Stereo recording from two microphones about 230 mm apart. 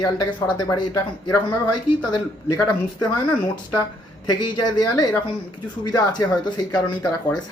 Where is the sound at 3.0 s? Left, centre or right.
Centre.